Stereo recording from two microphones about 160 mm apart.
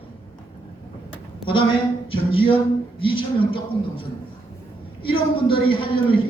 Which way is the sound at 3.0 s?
30° left (ahead or behind).